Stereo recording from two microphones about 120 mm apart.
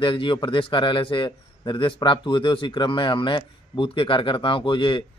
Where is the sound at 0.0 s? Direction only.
45° left (ahead or behind).